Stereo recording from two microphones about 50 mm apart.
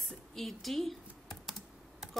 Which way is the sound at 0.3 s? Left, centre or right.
Centre.